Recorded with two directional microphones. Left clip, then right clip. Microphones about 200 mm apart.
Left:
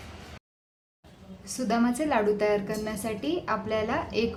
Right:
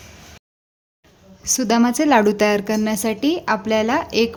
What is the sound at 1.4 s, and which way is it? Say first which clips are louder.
A woman's voice: right 9 dB; 55° right (ahead or behind).